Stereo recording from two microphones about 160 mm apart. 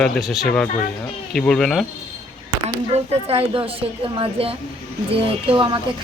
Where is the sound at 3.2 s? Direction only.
35° right (ahead or behind).